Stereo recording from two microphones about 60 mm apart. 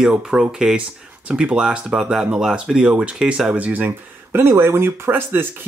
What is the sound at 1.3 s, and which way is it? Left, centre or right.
Speech, right.